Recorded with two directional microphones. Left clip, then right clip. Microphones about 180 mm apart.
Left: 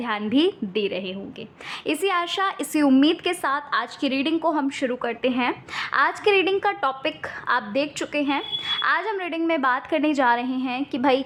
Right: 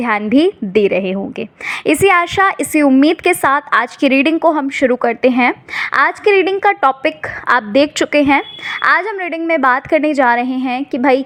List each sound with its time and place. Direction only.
0.0 s a woman's voice: 30° right (ahead or behind)
0.7 s a woman's voice: 35° right (ahead or behind)
9.1 s a woman's voice: 20° right (ahead or behind)